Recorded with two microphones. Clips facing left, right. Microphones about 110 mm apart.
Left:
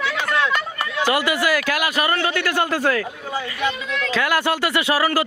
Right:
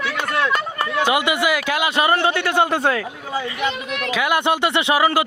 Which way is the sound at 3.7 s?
65° right (ahead or behind).